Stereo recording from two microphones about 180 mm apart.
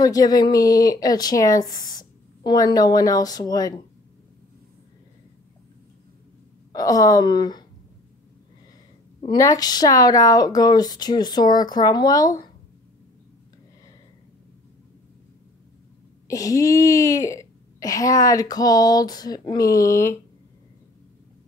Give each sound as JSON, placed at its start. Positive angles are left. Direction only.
{"t": 0.0, "sound": "a woman's voice", "side_deg": 20}
{"t": 6.7, "sound": "a woman's voice", "side_deg": 20}
{"t": 9.2, "sound": "a woman's voice", "side_deg": 20}
{"t": 16.3, "sound": "a woman's voice", "side_deg": 20}